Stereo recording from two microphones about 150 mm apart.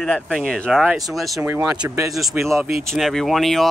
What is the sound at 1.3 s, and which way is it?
Speech, 15° right (ahead or behind).